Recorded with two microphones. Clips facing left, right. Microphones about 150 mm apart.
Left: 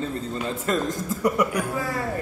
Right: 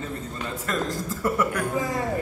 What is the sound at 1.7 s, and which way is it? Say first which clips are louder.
Speech: right 1 dB; 20° right (ahead or behind).